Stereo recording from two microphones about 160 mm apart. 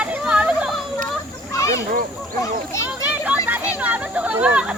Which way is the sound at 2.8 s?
10° right (ahead or behind).